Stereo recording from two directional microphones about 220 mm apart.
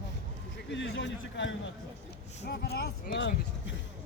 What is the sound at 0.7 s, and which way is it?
A man's voice, 55° left (ahead or behind).